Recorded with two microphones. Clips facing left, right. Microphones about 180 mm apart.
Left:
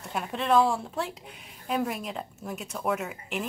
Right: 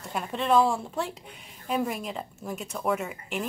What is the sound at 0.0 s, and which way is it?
A woman's voice, centre (ahead or behind).